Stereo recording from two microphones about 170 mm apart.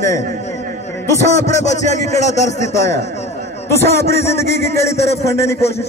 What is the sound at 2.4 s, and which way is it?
Speech, 15° left (ahead or behind).